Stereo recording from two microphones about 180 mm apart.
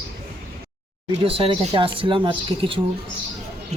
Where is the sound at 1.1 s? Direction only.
30° right (ahead or behind).